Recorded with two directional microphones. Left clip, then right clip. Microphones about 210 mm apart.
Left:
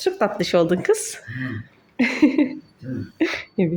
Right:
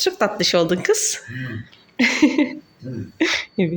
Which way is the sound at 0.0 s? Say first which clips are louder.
Right 2 dB; 10° left (ahead or behind).